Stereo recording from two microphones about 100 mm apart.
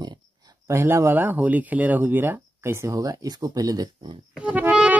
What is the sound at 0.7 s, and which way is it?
Speech, 30° right (ahead or behind).